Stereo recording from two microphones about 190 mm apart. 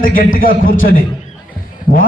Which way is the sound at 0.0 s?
45° left (ahead or behind).